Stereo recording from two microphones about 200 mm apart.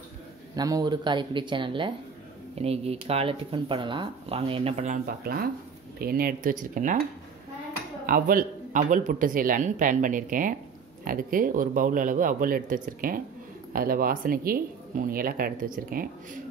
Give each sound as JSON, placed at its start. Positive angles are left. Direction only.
{"t": 0.6, "sound": "speech", "side_deg": -20}
{"t": 8.1, "sound": "speech", "side_deg": -45}